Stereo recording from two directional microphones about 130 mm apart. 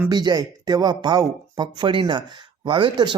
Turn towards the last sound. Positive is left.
turn(degrees=-40)  # may be behind; listen again after turning